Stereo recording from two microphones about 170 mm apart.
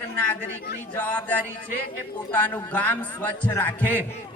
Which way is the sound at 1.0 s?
10° left (ahead or behind).